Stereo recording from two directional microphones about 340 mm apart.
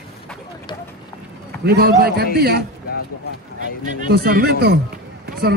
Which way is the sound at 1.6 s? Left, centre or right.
Right.